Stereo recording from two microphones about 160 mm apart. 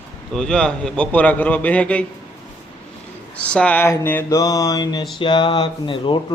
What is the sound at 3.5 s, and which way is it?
Speech, 10° left (ahead or behind).